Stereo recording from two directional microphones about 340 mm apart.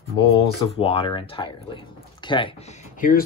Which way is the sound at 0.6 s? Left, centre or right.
Centre.